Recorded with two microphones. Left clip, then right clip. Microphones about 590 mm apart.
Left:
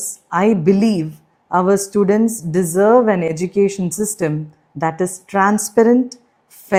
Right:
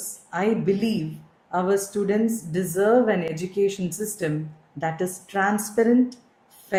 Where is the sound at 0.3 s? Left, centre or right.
Left.